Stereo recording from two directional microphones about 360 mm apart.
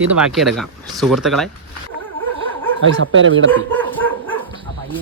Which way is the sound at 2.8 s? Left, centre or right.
Right.